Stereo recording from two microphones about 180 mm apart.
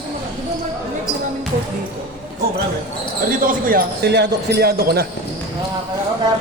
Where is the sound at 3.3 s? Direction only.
50° right (ahead or behind).